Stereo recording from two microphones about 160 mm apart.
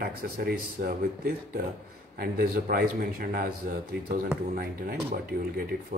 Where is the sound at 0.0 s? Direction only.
70° right (ahead or behind).